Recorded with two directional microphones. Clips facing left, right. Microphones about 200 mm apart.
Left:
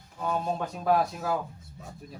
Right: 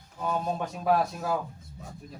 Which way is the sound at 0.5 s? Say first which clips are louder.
Even; 5° right (ahead or behind).